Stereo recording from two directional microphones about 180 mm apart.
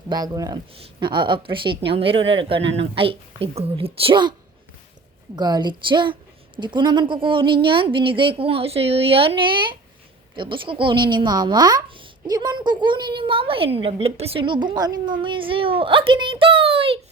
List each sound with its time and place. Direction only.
0.1 s a woman's voice: 20° right (ahead or behind)
5.4 s a woman's voice: 25° right (ahead or behind)